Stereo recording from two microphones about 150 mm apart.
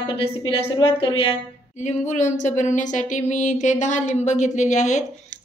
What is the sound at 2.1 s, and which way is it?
Speech, 55° left (ahead or behind).